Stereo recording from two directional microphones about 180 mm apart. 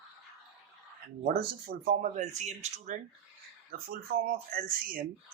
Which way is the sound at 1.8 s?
55° right (ahead or behind).